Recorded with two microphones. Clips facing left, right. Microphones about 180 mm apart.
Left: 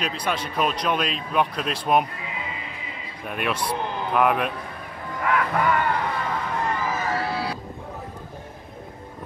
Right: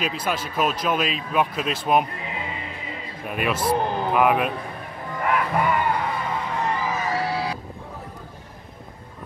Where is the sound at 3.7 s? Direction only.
40° right (ahead or behind).